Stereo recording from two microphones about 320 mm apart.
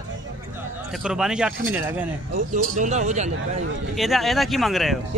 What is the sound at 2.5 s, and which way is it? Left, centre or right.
Speech, right.